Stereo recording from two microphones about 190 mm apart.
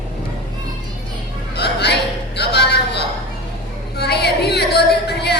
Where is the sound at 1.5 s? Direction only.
60° left (ahead or behind).